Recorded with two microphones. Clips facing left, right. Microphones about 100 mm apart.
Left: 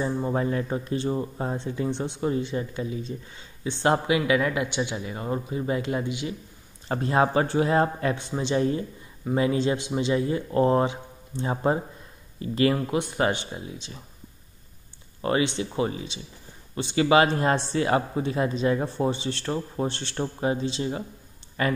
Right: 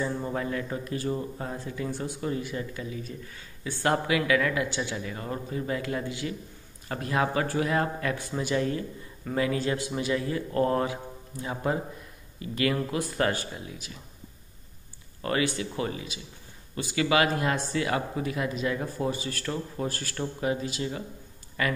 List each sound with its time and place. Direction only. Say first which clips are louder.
0.0 s speech: left 4 dB; 30° left (ahead or behind)
15.2 s speech: left 3 dB; 25° left (ahead or behind)